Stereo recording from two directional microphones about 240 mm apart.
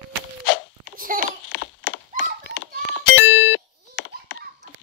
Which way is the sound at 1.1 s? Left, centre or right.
Right.